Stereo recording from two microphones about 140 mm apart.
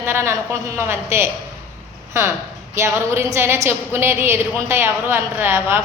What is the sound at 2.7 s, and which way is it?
A woman's voice, 20° right (ahead or behind).